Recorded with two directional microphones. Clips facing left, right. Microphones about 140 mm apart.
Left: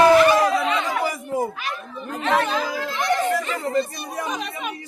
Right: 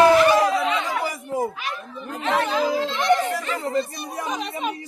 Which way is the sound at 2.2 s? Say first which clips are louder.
Even; 20° right (ahead or behind).